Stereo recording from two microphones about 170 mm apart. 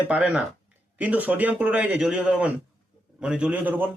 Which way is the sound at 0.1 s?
5° right (ahead or behind).